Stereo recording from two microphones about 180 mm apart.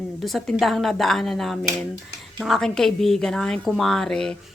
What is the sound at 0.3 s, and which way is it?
A woman's voice, centre (ahead or behind).